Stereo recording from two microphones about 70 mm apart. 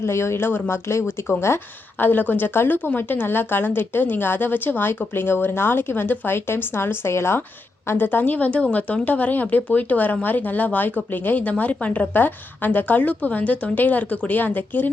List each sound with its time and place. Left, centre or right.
0.0 s speech: left